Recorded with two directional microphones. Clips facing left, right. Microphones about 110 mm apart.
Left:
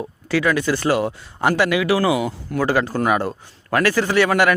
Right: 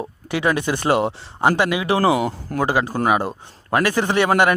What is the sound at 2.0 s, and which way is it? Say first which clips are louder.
Speech: right 1 dB; 40° right (ahead or behind).